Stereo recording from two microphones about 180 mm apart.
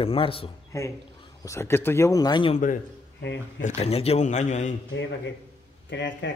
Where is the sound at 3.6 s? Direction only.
35° left (ahead or behind).